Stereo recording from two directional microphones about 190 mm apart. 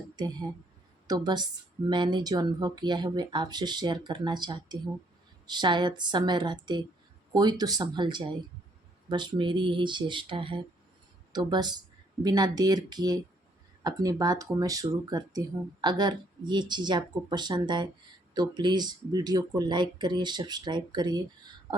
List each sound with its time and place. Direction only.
0.2 s speech: 20° right (ahead or behind)